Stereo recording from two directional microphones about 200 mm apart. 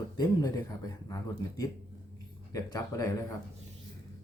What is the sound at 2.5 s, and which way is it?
Speech, 20° left (ahead or behind).